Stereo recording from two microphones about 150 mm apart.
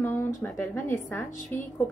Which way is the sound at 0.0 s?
15° left (ahead or behind).